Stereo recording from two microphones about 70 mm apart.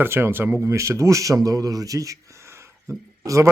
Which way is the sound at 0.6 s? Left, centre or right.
Right.